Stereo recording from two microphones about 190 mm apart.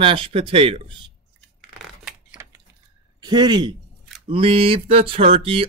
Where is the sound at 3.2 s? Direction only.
20° right (ahead or behind).